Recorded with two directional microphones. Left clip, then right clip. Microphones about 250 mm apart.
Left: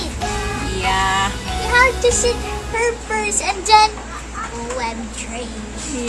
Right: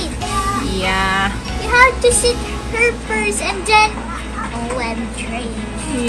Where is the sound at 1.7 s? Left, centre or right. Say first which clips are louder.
Right 3 dB; left.